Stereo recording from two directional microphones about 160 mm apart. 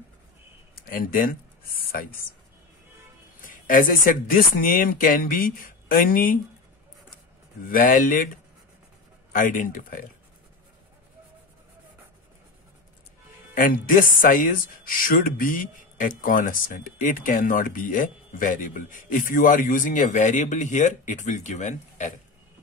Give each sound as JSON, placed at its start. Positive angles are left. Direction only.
{"t": 0.7, "sound": "speech", "side_deg": 65}
{"t": 3.4, "sound": "speech", "side_deg": 55}
{"t": 7.7, "sound": "speech", "side_deg": 55}
{"t": 9.3, "sound": "speech", "side_deg": 60}
{"t": 13.6, "sound": "speech", "side_deg": 60}